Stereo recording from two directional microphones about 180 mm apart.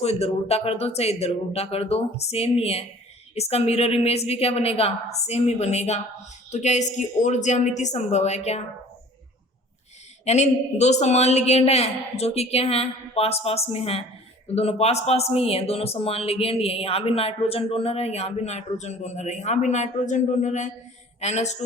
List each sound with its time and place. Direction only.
0.0 s speech: 35° left (ahead or behind)
10.2 s speech: 40° left (ahead or behind)